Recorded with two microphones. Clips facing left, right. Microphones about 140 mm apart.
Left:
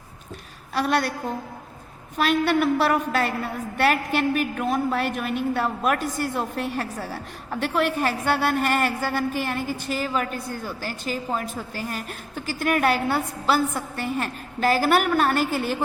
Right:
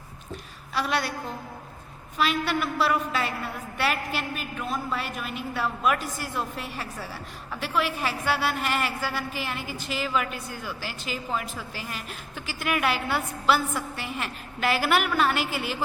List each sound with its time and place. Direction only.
0.7 s a woman's voice: 50° left (ahead or behind)
2.1 s a woman's voice: 50° left (ahead or behind)